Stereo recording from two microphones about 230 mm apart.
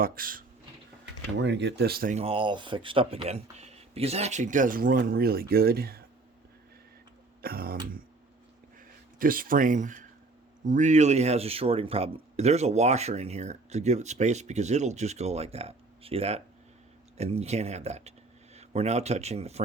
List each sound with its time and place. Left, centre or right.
0.0 s speech: right
1.4 s speech: right
7.4 s speech: right
9.1 s speech: right